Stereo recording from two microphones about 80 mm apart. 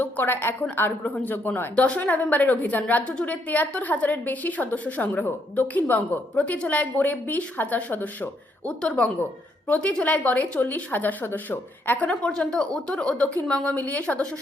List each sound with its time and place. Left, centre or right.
0.0 s a woman's voice: left
8.8 s speech: centre